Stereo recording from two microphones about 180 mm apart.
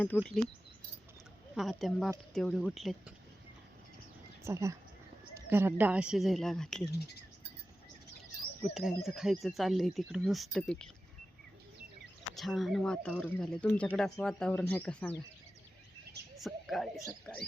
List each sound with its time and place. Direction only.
0.1 s speech: 10° left (ahead or behind)
1.5 s speech: centre (ahead or behind)
4.4 s speech: 15° right (ahead or behind); by 6.9 s 5° left (ahead or behind)
8.6 s speech: centre (ahead or behind)
12.4 s speech: centre (ahead or behind)
16.4 s speech: centre (ahead or behind)